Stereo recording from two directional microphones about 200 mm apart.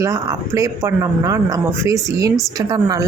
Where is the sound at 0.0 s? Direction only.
15° right (ahead or behind).